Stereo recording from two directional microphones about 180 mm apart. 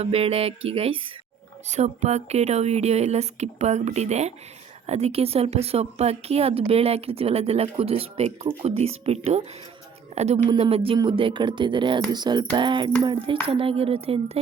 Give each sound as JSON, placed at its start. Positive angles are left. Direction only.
{"t": 0.0, "sound": "a woman's voice", "side_deg": -35}